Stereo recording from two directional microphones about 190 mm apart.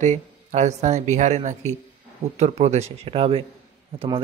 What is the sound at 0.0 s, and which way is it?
Speech, 40° right (ahead or behind).